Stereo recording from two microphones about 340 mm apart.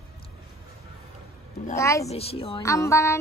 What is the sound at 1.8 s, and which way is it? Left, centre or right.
Music, centre.